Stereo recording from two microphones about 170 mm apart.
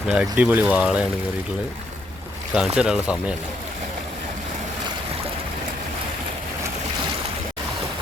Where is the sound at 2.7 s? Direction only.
5° right (ahead or behind).